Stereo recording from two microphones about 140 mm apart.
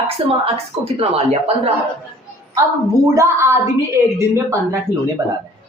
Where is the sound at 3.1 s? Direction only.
20° right (ahead or behind).